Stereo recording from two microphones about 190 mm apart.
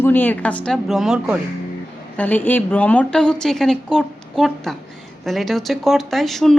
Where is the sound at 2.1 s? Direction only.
10° left (ahead or behind).